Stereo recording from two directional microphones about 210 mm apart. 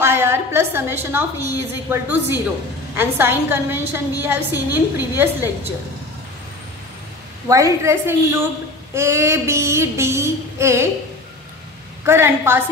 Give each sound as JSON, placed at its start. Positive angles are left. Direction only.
{"t": 0.0, "sound": "a woman's voice", "side_deg": -10}
{"t": 1.9, "sound": "female singing", "side_deg": -10}
{"t": 7.4, "sound": "female singing", "side_deg": -15}
{"t": 12.0, "sound": "female singing", "side_deg": -10}